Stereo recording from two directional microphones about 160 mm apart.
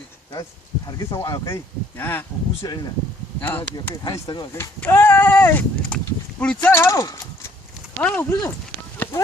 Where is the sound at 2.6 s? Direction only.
25° left (ahead or behind).